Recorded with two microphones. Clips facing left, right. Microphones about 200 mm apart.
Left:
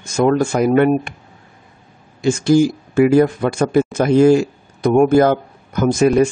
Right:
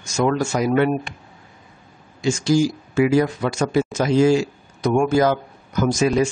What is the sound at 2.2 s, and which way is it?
Speech, 55° left (ahead or behind).